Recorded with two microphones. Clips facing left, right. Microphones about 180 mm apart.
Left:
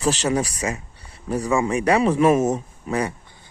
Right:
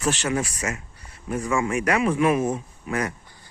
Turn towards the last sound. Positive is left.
turn(degrees=30)  # may be behind; listen again after turning